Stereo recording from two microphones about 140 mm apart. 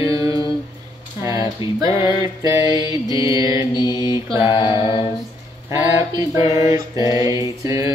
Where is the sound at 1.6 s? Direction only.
40° left (ahead or behind).